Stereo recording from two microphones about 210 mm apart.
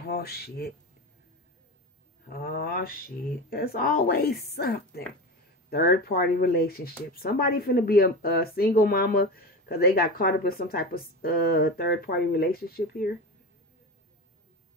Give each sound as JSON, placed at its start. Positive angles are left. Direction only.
{"t": 0.1, "sound": "speech", "side_deg": 50}
{"t": 2.2, "sound": "speech", "side_deg": 45}